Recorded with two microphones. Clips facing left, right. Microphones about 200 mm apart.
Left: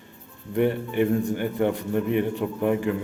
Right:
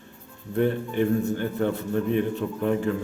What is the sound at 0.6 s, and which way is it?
A man's voice, 15° left (ahead or behind).